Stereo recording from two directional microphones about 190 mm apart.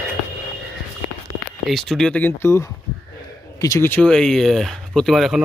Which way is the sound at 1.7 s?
Centre (ahead or behind).